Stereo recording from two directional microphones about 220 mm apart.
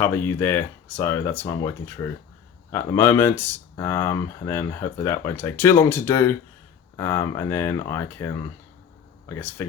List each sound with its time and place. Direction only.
0.0 s speech: 10° left (ahead or behind)
9.4 s speech: 10° left (ahead or behind)